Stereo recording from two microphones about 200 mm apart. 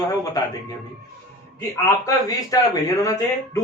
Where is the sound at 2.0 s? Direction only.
15° left (ahead or behind).